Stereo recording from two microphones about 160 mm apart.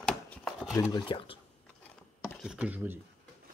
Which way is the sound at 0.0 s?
5° left (ahead or behind).